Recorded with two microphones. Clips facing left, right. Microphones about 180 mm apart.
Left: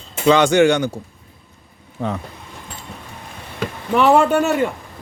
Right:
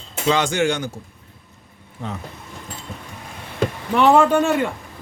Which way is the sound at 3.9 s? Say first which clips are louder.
Left 1 dB; 5° left (ahead or behind).